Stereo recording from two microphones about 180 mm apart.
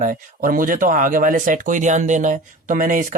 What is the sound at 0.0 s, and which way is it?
Speech, 50° right (ahead or behind).